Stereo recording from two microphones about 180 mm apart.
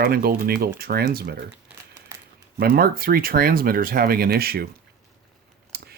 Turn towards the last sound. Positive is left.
turn(degrees=-60)  # may be behind; listen again after turning